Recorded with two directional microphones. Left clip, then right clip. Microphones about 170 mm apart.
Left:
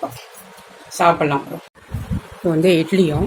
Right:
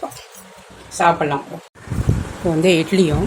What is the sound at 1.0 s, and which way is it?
Speech, 10° left (ahead or behind).